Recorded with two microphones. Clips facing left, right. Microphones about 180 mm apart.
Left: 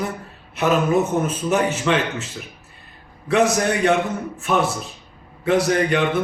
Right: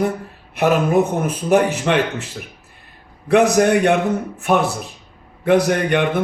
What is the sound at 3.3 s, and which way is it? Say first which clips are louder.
Speech: right 5 dB; 60° right (ahead or behind).